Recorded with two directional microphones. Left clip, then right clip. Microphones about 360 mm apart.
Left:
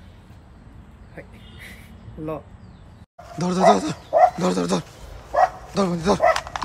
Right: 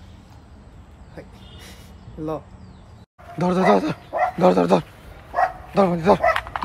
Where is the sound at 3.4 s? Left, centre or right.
Centre.